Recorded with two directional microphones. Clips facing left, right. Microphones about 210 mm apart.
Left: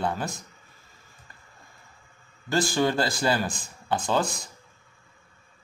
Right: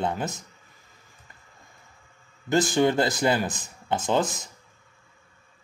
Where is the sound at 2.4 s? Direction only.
20° right (ahead or behind).